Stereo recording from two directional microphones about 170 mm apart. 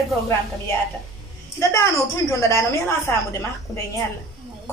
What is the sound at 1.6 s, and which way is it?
A woman's voice, 15° left (ahead or behind).